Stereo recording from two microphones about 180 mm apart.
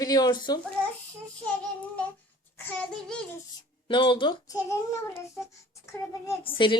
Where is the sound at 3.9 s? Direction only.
25° left (ahead or behind).